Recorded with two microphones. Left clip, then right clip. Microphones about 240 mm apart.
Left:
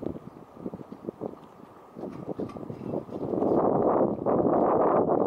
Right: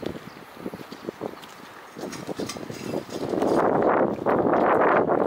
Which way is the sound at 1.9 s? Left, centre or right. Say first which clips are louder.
Right 3 dB; centre.